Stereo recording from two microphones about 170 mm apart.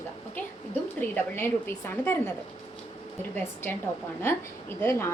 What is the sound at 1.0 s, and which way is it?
A woman's voice, 10° left (ahead or behind).